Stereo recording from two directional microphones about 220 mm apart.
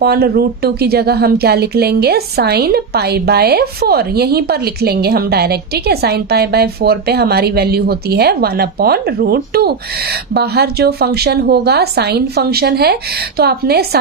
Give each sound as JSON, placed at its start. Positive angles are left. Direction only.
{"t": 0.0, "sound": "speech", "side_deg": -45}